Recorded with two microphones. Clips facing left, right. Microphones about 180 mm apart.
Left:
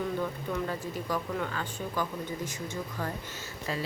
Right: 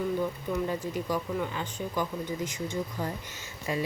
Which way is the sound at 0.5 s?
10° right (ahead or behind).